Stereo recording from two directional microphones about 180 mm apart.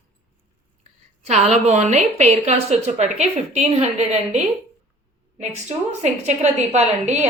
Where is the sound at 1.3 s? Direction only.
35° right (ahead or behind).